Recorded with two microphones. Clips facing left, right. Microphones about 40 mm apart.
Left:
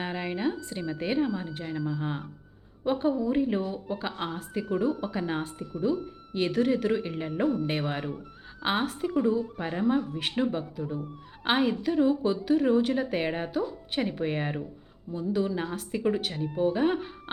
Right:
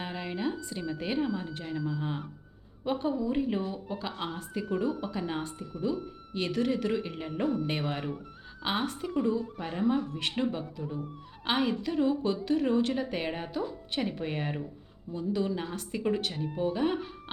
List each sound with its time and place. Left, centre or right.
0.0 s a woman's voice: centre
4.3 s a woman's voice: centre
9.8 s a woman's voice: centre